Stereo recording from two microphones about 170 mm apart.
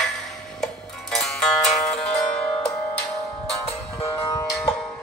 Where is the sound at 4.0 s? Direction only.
20° left (ahead or behind).